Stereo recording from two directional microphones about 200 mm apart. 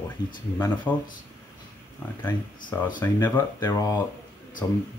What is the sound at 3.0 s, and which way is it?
Speech, 10° left (ahead or behind).